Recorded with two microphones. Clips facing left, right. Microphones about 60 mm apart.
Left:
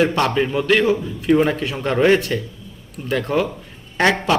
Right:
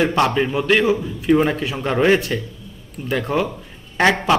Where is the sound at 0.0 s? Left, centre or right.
Centre.